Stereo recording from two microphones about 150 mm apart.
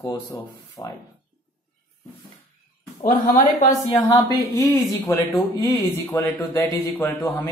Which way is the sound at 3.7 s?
20° left (ahead or behind).